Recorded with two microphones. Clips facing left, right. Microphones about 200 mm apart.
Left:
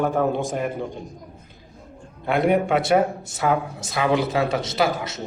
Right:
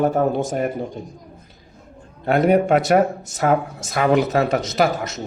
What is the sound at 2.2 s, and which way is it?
A man's voice, 45° right (ahead or behind).